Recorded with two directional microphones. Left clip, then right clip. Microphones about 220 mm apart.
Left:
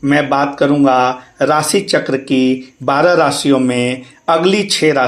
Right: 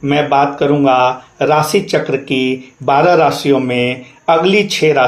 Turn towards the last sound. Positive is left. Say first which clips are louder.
# right 2 dB
turn(degrees=25)  # may be behind; listen again after turning